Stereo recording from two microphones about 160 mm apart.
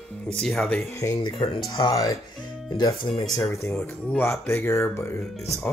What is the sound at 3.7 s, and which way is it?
Speech, 10° left (ahead or behind).